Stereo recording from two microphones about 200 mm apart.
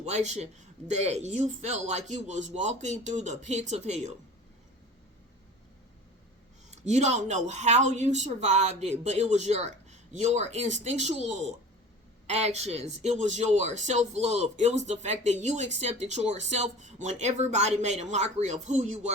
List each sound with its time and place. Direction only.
0.0 s speech: 35° right (ahead or behind)
6.7 s speech: 35° right (ahead or behind)